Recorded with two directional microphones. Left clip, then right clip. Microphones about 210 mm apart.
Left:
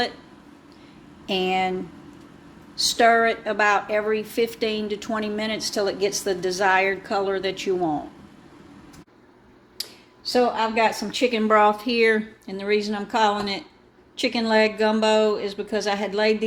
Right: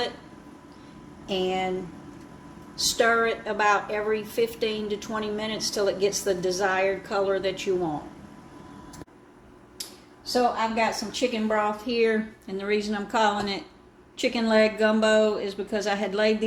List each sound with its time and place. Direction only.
1.3 s speech: 35° left (ahead or behind)
2.7 s a woman's voice: 30° left (ahead or behind)
10.8 s speech: 55° left (ahead or behind)
11.9 s speech: 30° left (ahead or behind)